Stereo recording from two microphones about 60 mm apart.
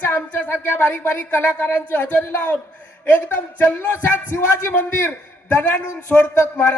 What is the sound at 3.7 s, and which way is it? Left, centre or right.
Speech, left.